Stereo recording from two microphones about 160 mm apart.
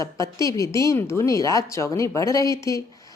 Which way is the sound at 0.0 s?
20° left (ahead or behind).